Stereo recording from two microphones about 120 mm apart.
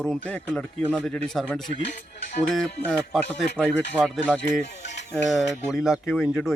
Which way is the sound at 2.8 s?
10° left (ahead or behind).